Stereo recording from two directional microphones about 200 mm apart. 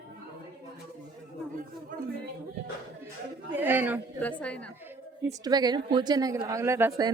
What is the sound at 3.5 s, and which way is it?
Speech, 10° right (ahead or behind).